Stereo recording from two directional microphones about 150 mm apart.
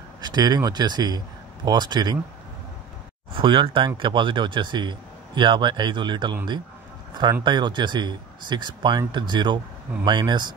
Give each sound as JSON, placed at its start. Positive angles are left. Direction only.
{"t": 0.2, "sound": "speech", "side_deg": -30}
{"t": 3.3, "sound": "speech", "side_deg": -35}
{"t": 7.4, "sound": "speech", "side_deg": -30}